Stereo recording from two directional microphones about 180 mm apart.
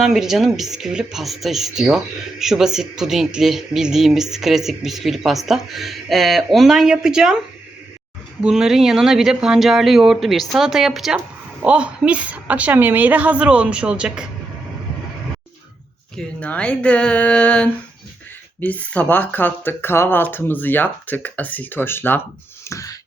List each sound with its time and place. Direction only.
0.0 s speech: 5° right (ahead or behind)
8.4 s a woman's voice: 5° right (ahead or behind)
16.1 s speech: 5° left (ahead or behind)
22.6 s a sound: 15° left (ahead or behind)